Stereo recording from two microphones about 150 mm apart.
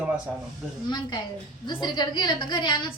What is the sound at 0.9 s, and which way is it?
A woman's voice, 30° left (ahead or behind).